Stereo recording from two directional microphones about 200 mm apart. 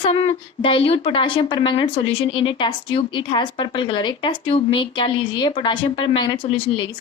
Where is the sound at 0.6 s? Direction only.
25° left (ahead or behind).